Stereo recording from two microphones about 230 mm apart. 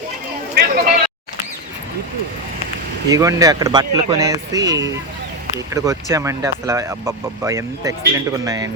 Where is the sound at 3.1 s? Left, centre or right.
Centre.